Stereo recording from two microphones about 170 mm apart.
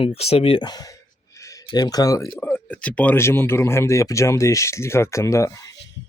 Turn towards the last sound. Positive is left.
turn(degrees=15)  # may be behind; listen again after turning